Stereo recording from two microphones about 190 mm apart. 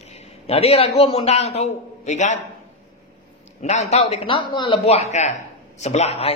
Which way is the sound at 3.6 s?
35° left (ahead or behind).